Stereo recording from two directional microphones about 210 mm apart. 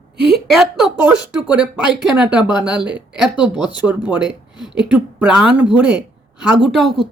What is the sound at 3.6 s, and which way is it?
Speech, 20° left (ahead or behind).